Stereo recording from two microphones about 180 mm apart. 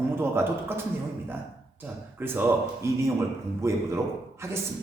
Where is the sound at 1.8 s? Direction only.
10° right (ahead or behind).